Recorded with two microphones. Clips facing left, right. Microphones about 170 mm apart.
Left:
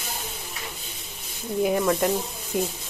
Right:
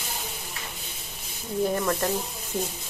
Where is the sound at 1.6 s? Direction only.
10° left (ahead or behind).